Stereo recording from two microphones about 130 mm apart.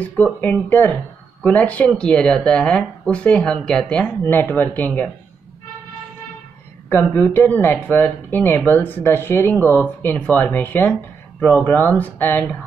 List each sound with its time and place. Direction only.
0.4 s speech: 15° left (ahead or behind)
6.9 s speech: 15° left (ahead or behind)